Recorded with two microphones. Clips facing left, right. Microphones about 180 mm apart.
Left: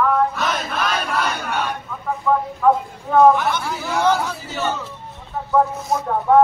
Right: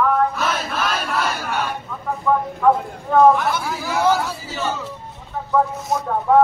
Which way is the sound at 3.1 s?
Centre (ahead or behind).